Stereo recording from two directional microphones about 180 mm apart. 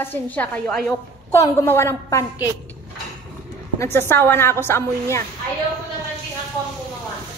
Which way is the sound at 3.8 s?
15° left (ahead or behind).